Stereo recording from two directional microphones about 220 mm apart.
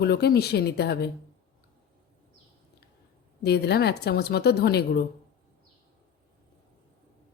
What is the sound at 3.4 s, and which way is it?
A woman's voice, 50° left (ahead or behind).